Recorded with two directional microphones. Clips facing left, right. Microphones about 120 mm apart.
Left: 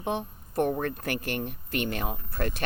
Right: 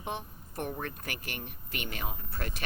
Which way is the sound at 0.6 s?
45° left (ahead or behind).